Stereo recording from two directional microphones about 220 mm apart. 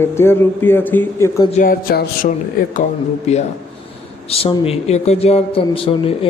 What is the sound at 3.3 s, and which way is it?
A man's voice, 30° left (ahead or behind).